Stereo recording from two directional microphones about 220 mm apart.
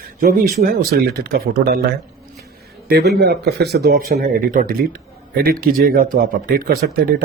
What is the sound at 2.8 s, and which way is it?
Speech, 45° right (ahead or behind).